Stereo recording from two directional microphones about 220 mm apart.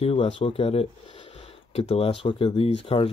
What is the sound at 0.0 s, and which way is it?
Speech, 25° left (ahead or behind).